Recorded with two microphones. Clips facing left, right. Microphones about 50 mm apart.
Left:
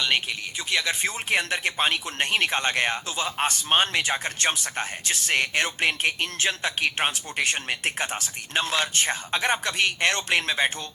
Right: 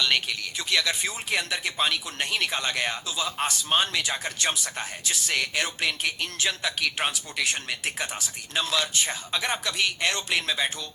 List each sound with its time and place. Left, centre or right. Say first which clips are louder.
0.0 s speech: even; left
1.0 s speech: left 3 dB; left